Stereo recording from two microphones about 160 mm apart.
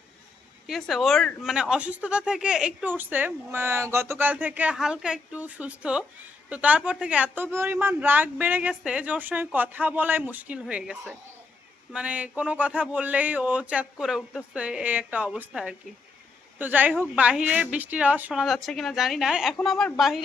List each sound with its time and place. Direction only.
0.7 s a woman's voice: centre (ahead or behind)